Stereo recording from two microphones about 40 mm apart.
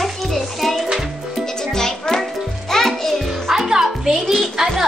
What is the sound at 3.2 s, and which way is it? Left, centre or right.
Music, centre.